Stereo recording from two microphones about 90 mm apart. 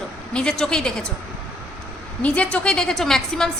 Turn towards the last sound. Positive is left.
turn(degrees=5)  # may be behind; listen again after turning